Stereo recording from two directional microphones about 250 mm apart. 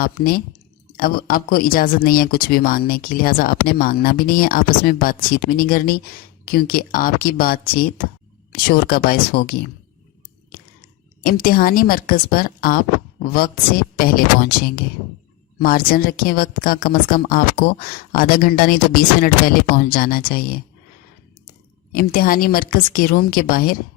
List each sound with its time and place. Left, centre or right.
0.0 s a woman's voice: left
21.9 s a woman's voice: left